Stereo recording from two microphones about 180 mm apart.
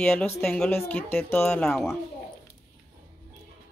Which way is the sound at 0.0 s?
5° left (ahead or behind).